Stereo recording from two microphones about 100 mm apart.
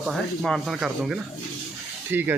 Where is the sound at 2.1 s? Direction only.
20° right (ahead or behind).